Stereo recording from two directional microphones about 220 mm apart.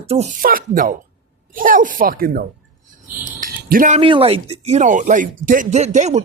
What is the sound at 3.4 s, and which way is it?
Speech, 35° right (ahead or behind).